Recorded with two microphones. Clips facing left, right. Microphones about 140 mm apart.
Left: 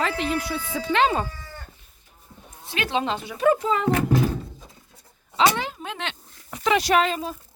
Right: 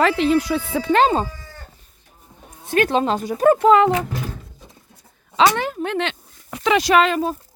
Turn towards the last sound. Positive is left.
turn(degrees=-85)